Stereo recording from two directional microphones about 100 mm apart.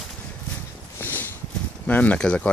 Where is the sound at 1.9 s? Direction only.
15° left (ahead or behind).